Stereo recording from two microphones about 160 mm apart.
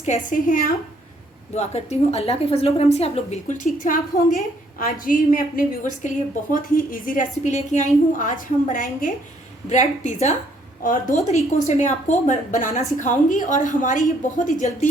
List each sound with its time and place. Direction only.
0.0 s a woman's voice: 50° left (ahead or behind)
1.5 s a woman's voice: 45° left (ahead or behind)
3.8 s a woman's voice: 55° left (ahead or behind)
9.6 s a woman's voice: 50° left (ahead or behind)
10.8 s a woman's voice: 60° left (ahead or behind)
11.6 s a woman's voice: 45° left (ahead or behind)